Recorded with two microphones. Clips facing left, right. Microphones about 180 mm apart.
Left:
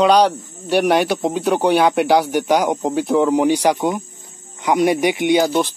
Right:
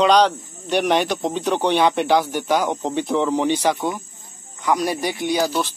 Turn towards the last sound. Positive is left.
turn(degrees=20)  # may be behind; listen again after turning